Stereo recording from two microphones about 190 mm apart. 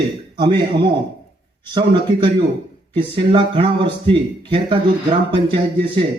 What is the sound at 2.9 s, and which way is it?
A man's voice, 25° right (ahead or behind).